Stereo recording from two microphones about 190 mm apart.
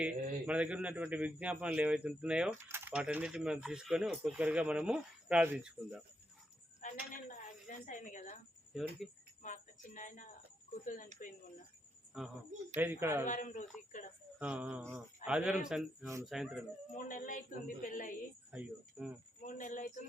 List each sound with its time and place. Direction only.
0.0 s a man's voice: 5° right (ahead or behind)
6.8 s a sound: 45° left (ahead or behind)
7.7 s a woman's voice: 45° left (ahead or behind)
8.7 s speech: centre (ahead or behind)
9.4 s music: 40° left (ahead or behind)
10.8 s speech: 45° left (ahead or behind)
12.1 s speech: centre (ahead or behind)
12.7 s a man's voice: 10° right (ahead or behind)
13.2 s a sound: 40° left (ahead or behind)
14.3 s a man's voice: 5° right (ahead or behind)
16.9 s speech: 40° left (ahead or behind)
18.5 s speech: 5° right (ahead or behind)
19.4 s a sound: 40° left (ahead or behind)